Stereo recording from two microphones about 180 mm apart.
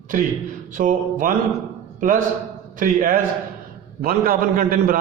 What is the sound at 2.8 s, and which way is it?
A man's voice, 50° right (ahead or behind).